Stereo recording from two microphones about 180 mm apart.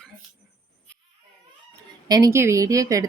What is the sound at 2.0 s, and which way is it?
Speech, 20° right (ahead or behind).